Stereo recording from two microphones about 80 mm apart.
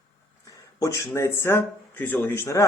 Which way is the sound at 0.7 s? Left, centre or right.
Left.